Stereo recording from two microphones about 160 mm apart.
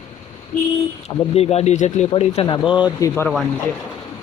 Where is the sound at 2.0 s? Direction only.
35° left (ahead or behind).